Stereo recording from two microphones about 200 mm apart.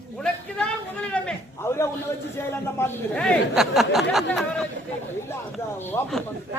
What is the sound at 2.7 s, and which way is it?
Speech, 10° left (ahead or behind).